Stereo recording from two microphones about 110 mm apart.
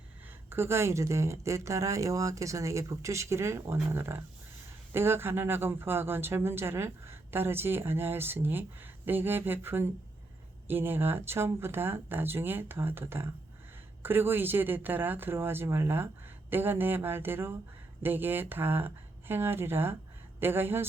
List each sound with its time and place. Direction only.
0.5 s speech: 25° right (ahead or behind)